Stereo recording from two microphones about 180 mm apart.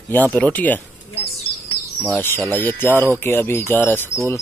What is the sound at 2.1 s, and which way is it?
Speech, 10° left (ahead or behind).